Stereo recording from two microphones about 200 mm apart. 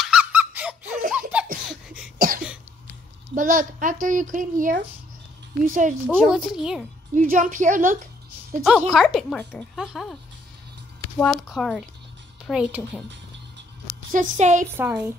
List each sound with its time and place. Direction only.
0.0 s squeak: 5° right (ahead or behind)
1.1 s laughter: 5° right (ahead or behind)
2.1 s cough: 45° right (ahead or behind)
3.3 s speech: 40° right (ahead or behind)
6.0 s a woman's voice: 5° right (ahead or behind)
7.2 s speech: 40° right (ahead or behind)
8.6 s a woman's voice: centre (ahead or behind)
11.4 s a woman's voice: centre (ahead or behind)
14.1 s speech: 35° right (ahead or behind)
14.7 s speech: 10° right (ahead or behind)